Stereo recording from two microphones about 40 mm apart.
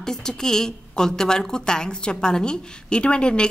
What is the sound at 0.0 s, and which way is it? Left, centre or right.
A woman's voice, centre.